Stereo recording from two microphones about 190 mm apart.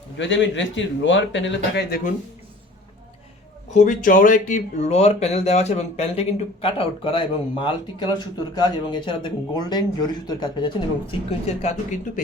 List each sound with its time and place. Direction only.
0.2 s a man's voice: 70° left (ahead or behind); by 2.1 s 55° left (ahead or behind)
3.7 s speech: 40° left (ahead or behind)